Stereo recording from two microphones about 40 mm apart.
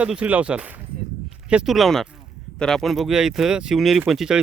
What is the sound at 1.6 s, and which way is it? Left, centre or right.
Speech, centre.